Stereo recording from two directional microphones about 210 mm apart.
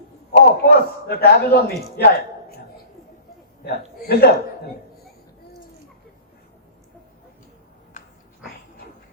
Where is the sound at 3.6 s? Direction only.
50° left (ahead or behind).